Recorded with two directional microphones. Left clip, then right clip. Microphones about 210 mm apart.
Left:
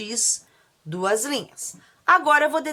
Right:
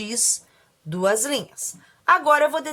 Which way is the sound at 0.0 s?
5° right (ahead or behind).